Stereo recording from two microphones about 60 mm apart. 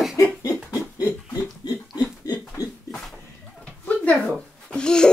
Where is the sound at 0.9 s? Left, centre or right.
Left.